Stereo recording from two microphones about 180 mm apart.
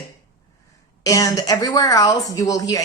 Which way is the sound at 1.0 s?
20° left (ahead or behind).